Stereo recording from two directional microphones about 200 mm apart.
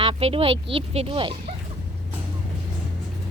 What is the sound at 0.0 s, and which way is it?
Speech, 30° right (ahead or behind).